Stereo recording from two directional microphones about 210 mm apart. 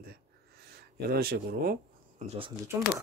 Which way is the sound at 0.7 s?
50° right (ahead or behind).